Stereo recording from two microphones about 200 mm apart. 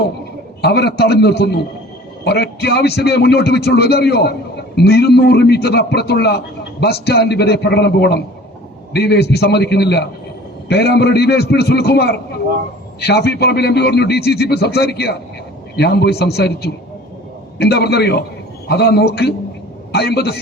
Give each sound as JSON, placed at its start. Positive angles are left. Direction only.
{"t": 0.6, "sound": "a man's voice", "side_deg": 55}